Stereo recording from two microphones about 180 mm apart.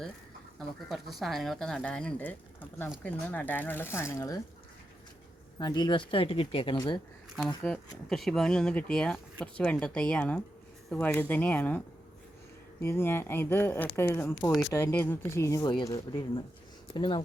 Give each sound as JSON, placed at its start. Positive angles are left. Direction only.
{"t": 0.9, "sound": "speech", "side_deg": 0}
{"t": 5.5, "sound": "speech", "side_deg": 25}
{"t": 7.3, "sound": "speech", "side_deg": 0}
{"t": 12.8, "sound": "speech", "side_deg": 15}